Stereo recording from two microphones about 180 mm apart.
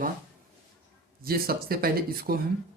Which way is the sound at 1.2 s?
55° right (ahead or behind).